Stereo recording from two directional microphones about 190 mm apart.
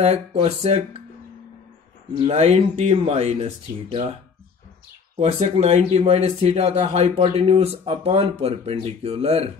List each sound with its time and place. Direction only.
0.0 s speech: 35° right (ahead or behind)
2.1 s speech: 30° right (ahead or behind)
5.1 s speech: 35° right (ahead or behind)